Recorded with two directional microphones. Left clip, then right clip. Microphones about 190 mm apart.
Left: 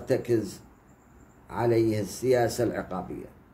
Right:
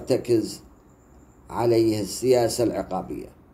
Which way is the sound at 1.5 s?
15° right (ahead or behind).